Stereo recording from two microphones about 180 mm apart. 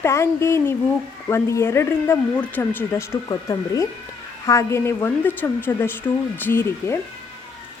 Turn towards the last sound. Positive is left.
turn(degrees=10)  # may be behind; listen again after turning